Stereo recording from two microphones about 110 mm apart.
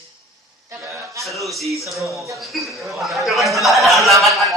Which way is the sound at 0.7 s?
25° right (ahead or behind).